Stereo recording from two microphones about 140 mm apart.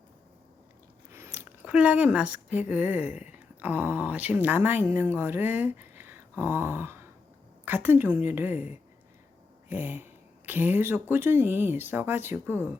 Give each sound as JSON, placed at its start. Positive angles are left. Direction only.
{"t": 1.1, "sound": "speech", "side_deg": -15}